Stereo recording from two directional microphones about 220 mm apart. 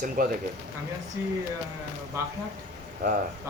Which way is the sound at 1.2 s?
10° right (ahead or behind).